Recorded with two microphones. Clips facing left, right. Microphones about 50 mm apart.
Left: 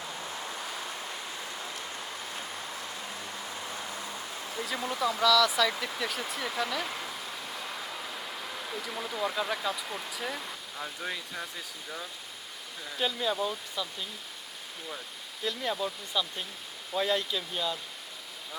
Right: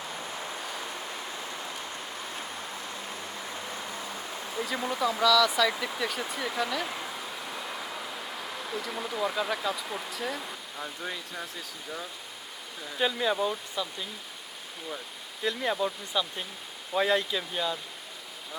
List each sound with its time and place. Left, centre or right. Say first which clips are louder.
4.6 s speech: right 3 dB; centre
4.9 s speech: right 1 dB; centre
7.5 s vehicle: right 2 dB; centre
8.7 s speech: right 3 dB; centre
13.0 s speech: right 3 dB; centre
15.4 s speech: right 3 dB; centre